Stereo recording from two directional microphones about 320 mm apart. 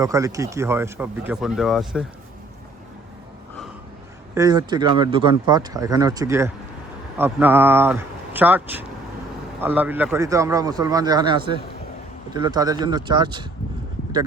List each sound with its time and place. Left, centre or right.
0.0 s speech: centre
4.4 s speech: centre